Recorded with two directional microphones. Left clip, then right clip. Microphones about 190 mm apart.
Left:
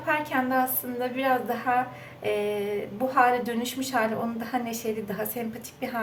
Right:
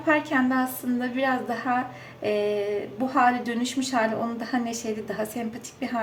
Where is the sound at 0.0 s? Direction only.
25° right (ahead or behind).